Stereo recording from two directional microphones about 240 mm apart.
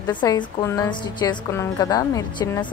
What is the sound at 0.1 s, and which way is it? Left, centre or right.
Speech, centre.